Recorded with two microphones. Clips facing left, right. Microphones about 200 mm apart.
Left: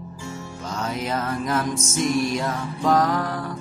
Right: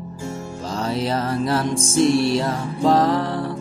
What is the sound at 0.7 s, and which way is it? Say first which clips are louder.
Music: right 4 dB; 30° right (ahead or behind).